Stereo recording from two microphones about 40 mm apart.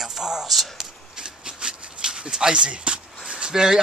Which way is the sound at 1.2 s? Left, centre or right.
Centre.